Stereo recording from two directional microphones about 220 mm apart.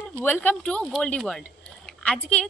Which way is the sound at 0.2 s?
10° left (ahead or behind).